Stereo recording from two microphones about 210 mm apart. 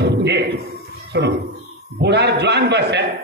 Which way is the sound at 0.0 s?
55° right (ahead or behind).